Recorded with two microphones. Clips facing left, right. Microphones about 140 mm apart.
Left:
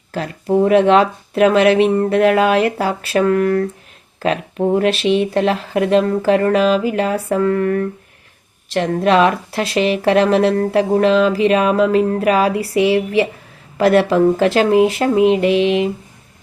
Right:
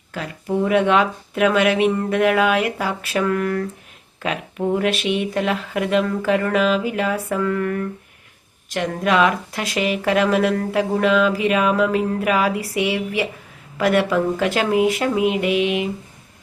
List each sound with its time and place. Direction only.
0.1 s speech: 35° left (ahead or behind)